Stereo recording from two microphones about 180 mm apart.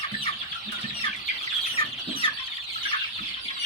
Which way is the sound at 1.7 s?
30° left (ahead or behind).